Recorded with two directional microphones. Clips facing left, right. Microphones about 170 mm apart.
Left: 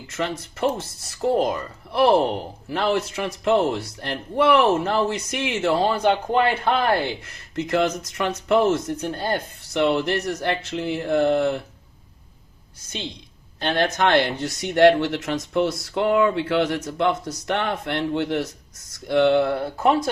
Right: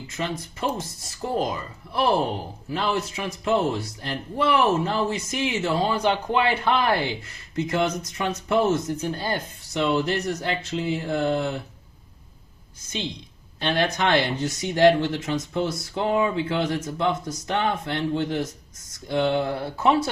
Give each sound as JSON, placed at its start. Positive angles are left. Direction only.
{"t": 0.1, "sound": "speech", "side_deg": 70}
{"t": 7.5, "sound": "speech", "side_deg": 65}
{"t": 13.6, "sound": "speech", "side_deg": 50}